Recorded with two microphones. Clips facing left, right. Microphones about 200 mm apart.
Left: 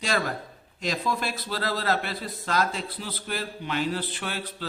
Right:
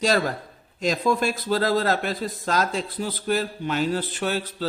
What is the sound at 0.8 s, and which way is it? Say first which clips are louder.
A man's voice: right 6 dB; 45° right (ahead or behind).